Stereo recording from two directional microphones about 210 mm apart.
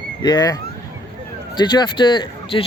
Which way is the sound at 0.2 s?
20° left (ahead or behind).